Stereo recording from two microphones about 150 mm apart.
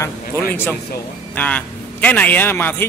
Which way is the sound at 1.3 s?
10° left (ahead or behind).